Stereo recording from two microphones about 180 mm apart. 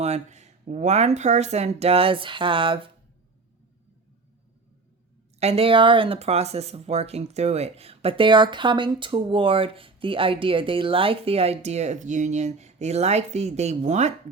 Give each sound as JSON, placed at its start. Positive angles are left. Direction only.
{"t": 0.0, "sound": "speech", "side_deg": -40}
{"t": 5.4, "sound": "speech", "side_deg": -35}